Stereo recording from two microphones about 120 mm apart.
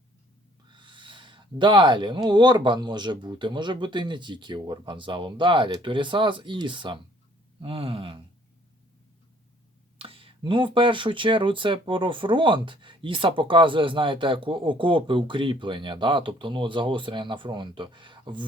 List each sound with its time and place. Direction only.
0.7 s speech: 40° right (ahead or behind)
10.0 s speech: 50° right (ahead or behind)